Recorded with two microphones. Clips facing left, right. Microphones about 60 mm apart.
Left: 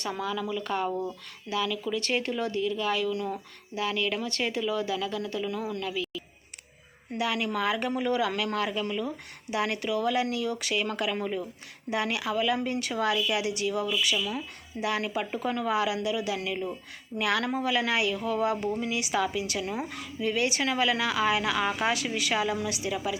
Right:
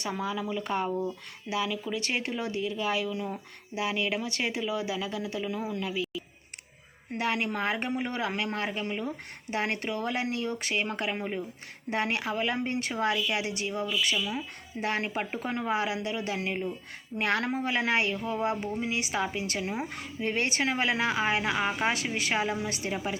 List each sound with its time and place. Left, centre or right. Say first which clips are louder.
0.1 s speech: left 1 dB; centre
7.1 s a woman's voice: left 1 dB; right
14.8 s a woman's voice: left 1 dB; right